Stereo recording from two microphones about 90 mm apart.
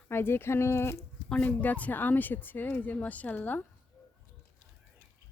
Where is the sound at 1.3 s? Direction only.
15° left (ahead or behind).